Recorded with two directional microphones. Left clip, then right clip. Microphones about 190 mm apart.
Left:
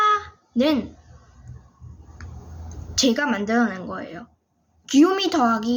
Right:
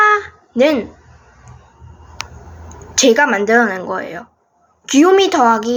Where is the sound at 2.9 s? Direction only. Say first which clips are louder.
Right 10 dB; 5° left (ahead or behind).